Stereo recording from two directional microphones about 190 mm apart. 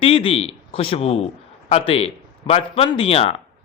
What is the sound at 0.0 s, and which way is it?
A man's voice, 30° left (ahead or behind).